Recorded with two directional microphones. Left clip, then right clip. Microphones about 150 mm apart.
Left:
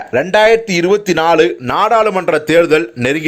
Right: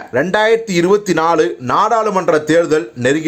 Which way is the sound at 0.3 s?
Centre (ahead or behind).